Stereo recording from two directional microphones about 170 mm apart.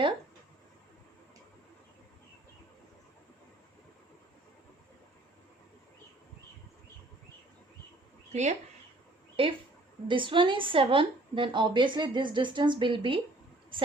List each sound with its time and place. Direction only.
8.3 s speech: 40° right (ahead or behind)
9.3 s a woman's voice: 30° right (ahead or behind)